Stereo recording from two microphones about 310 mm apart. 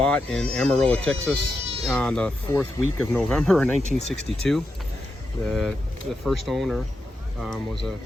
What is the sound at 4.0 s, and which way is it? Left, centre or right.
Speech, right.